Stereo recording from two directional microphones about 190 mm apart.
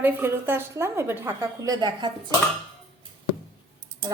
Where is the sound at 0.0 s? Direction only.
10° right (ahead or behind).